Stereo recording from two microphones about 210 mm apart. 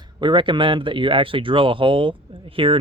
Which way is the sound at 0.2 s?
20° right (ahead or behind).